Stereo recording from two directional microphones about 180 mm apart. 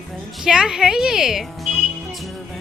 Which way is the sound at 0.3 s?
5° right (ahead or behind).